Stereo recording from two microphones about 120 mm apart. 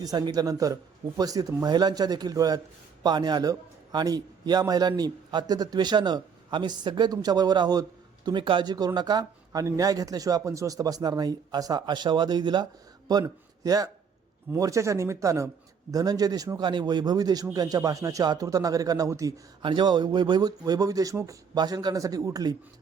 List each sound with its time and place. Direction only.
0.0 s a man's voice: 35° right (ahead or behind)
19.6 s a man's voice: 40° right (ahead or behind)